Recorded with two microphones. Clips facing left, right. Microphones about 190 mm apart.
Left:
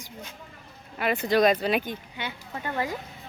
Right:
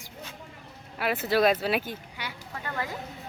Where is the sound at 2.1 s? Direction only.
25° left (ahead or behind).